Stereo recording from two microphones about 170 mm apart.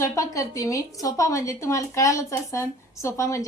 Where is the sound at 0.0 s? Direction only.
20° left (ahead or behind).